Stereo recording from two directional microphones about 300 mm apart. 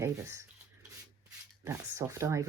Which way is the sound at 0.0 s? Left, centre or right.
Centre.